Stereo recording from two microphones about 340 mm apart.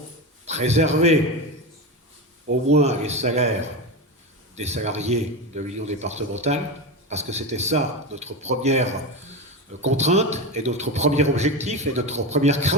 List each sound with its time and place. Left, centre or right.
0.4 s a man's voice: centre
2.6 s a man's voice: centre
4.5 s a man's voice: centre